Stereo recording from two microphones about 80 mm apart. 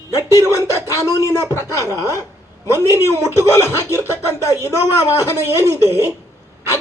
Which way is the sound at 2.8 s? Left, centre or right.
Right.